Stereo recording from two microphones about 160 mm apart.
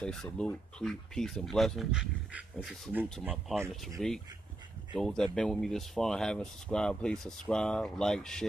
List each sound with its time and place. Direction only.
0.0 s speech: 5° left (ahead or behind)
4.0 s speech: 5° left (ahead or behind)